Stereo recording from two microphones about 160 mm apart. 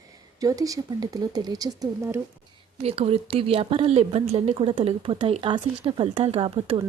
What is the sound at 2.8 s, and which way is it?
A woman's voice, 40° right (ahead or behind).